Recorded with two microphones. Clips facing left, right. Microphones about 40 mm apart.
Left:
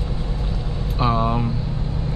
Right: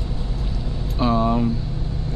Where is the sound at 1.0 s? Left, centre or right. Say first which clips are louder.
Right 1 dB; centre.